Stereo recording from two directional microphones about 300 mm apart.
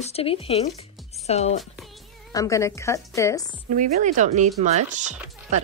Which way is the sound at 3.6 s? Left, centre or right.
Right.